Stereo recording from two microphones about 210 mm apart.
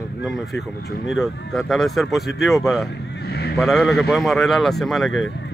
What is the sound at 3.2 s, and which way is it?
Vehicle, 50° left (ahead or behind).